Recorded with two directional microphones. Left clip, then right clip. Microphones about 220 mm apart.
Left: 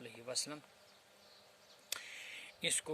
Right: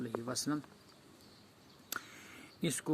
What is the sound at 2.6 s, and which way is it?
Speech, 40° left (ahead or behind).